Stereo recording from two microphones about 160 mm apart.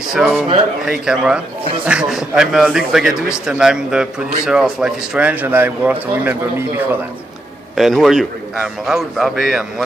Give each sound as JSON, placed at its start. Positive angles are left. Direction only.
{"t": 0.1, "sound": "speech", "side_deg": 0}
{"t": 7.7, "sound": "speech", "side_deg": 0}